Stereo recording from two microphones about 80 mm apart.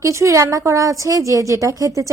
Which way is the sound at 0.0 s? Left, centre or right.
Right.